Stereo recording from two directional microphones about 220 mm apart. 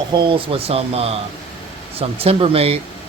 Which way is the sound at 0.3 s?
25° right (ahead or behind).